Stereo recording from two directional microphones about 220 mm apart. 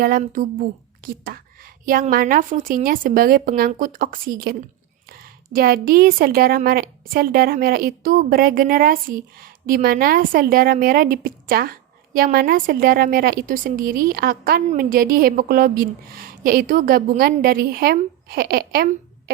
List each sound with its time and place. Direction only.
0.0 s a woman's voice: 40° right (ahead or behind)